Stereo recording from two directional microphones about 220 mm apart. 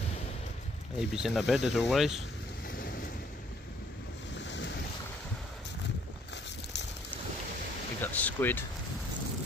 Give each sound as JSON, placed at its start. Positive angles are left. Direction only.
{"t": 0.9, "sound": "speech", "side_deg": 0}
{"t": 1.6, "sound": "speech", "side_deg": 55}
{"t": 1.9, "sound": "speech", "side_deg": 0}
{"t": 2.7, "sound": "waves", "side_deg": 40}
{"t": 4.4, "sound": "ocean", "side_deg": 55}
{"t": 6.3, "sound": "boat", "side_deg": 50}
{"t": 8.0, "sound": "speech", "side_deg": 5}